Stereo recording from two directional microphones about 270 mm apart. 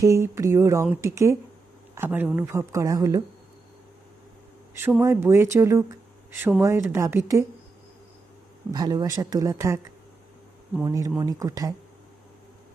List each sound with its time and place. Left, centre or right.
0.0 s speech: centre
4.7 s speech: centre
8.7 s speech: centre